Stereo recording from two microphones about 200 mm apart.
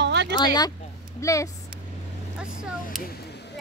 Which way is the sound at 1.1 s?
15° left (ahead or behind).